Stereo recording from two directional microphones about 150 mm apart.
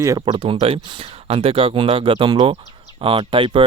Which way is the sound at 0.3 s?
35° right (ahead or behind).